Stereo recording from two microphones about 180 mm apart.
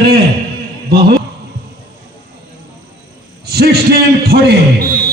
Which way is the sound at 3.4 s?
60° right (ahead or behind).